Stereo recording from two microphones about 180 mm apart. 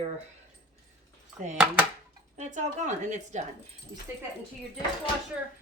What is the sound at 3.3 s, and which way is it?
Speech, 40° right (ahead or behind).